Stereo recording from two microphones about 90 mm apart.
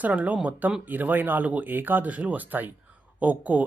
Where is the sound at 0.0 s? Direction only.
15° right (ahead or behind).